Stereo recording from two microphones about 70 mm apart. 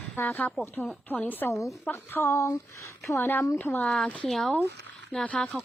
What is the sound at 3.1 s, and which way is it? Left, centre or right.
Speech, left.